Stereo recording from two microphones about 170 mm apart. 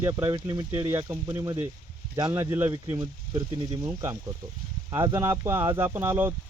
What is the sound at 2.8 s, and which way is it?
Speech, 25° right (ahead or behind).